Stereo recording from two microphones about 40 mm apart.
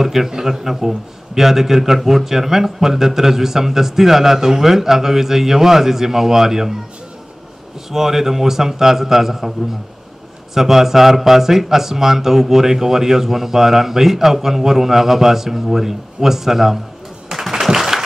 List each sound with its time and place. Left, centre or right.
0.0 s a man's voice: centre
7.9 s a man's voice: centre
10.5 s a man's voice: centre
17.3 s a sound: centre